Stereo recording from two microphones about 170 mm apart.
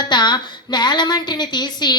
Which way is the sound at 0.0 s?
25° left (ahead or behind).